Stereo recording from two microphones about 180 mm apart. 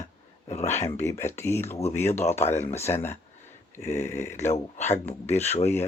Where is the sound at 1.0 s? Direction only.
15° left (ahead or behind).